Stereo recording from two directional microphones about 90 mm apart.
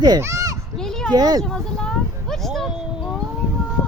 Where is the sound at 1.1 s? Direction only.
45° right (ahead or behind).